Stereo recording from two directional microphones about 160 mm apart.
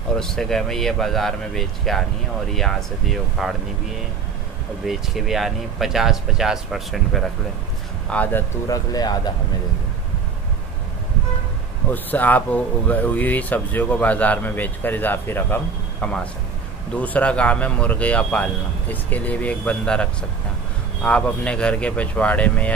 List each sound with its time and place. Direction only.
0.2 s speech: 5° left (ahead or behind)
4.8 s speech: centre (ahead or behind)
8.1 s speech: 10° left (ahead or behind)
11.9 s speech: 10° left (ahead or behind)